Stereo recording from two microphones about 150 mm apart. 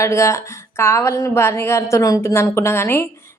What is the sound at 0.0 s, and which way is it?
A woman's voice, 20° left (ahead or behind).